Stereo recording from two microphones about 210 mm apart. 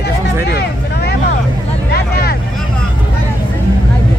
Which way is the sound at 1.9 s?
50° left (ahead or behind).